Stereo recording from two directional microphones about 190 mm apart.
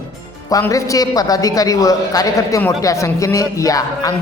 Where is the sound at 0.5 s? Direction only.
15° left (ahead or behind).